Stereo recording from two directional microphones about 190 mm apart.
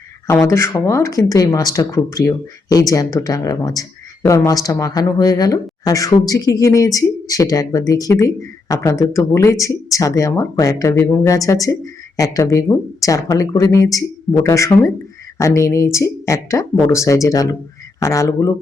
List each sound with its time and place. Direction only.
0.3 s speech: 15° left (ahead or behind)